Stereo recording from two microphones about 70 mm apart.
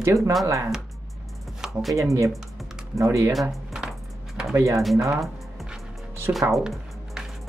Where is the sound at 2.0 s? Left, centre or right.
Right.